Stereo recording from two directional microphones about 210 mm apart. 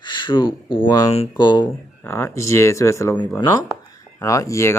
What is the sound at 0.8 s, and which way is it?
Speech, 15° left (ahead or behind).